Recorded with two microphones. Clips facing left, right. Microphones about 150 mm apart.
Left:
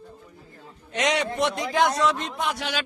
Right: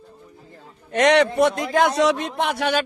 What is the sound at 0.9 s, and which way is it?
A man's voice, 55° right (ahead or behind).